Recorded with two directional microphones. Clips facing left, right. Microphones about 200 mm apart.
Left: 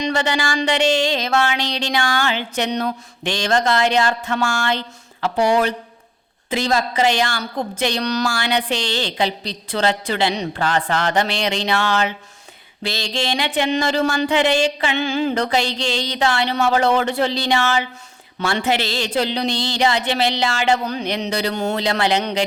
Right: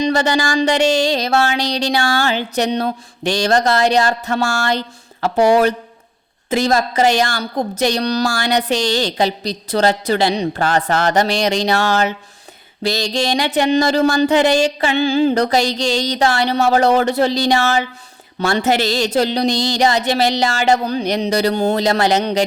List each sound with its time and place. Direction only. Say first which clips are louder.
0.0 s a woman's voice: right 4 dB; 40° right (ahead or behind)